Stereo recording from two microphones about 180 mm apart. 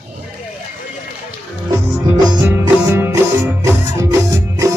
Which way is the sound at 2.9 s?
15° right (ahead or behind).